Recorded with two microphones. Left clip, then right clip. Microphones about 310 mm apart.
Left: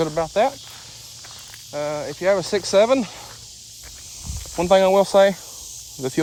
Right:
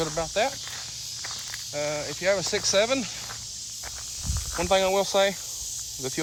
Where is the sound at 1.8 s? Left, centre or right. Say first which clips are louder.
Left 4 dB; left.